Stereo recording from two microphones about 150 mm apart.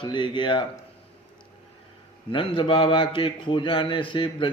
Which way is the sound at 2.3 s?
35° left (ahead or behind).